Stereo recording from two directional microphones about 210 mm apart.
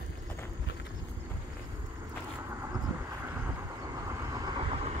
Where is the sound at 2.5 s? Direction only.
15° right (ahead or behind).